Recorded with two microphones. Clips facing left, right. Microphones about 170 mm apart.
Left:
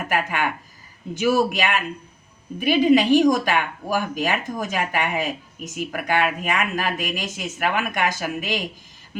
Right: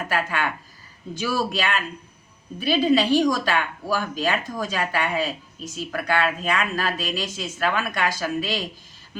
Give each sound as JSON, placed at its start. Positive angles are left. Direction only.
{"t": 0.1, "sound": "speech", "side_deg": 15}